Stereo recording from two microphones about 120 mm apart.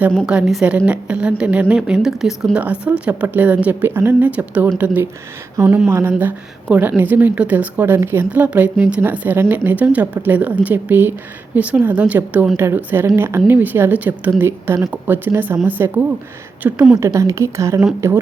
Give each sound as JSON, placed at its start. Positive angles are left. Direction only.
{"t": 0.3, "sound": "a woman's voice", "side_deg": -5}
{"t": 17.0, "sound": "a woman's voice", "side_deg": -25}